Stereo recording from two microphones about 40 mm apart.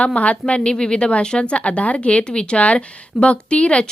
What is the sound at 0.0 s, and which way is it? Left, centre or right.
A woman's voice, left.